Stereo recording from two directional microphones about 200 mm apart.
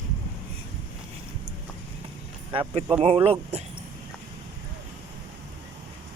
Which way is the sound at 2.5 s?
25° right (ahead or behind).